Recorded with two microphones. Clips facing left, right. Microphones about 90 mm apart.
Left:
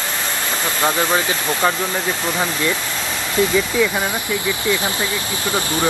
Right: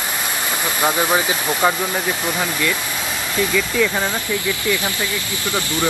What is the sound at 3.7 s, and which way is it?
Speech, 10° left (ahead or behind).